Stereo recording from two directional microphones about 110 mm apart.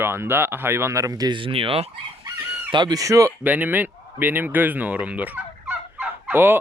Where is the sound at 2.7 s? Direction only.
40° right (ahead or behind).